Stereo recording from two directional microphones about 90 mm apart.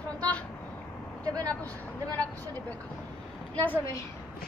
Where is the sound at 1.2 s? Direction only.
45° right (ahead or behind).